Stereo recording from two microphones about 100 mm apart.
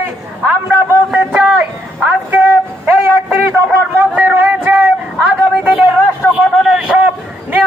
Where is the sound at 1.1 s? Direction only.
10° right (ahead or behind).